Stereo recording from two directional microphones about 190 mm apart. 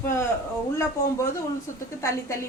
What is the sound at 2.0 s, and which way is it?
Speech, 15° left (ahead or behind).